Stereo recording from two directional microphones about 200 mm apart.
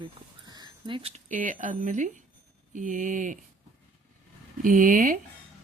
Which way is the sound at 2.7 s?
40° right (ahead or behind).